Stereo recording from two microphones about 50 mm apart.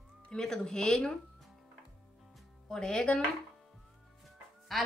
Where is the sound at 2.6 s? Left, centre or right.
Centre.